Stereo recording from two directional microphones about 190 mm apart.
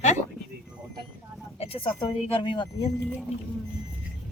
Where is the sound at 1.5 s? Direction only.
30° left (ahead or behind).